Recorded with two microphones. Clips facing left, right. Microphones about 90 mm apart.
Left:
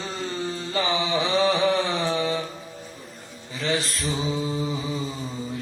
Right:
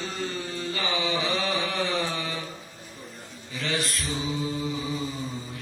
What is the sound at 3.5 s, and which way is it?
Mantra, 30° left (ahead or behind).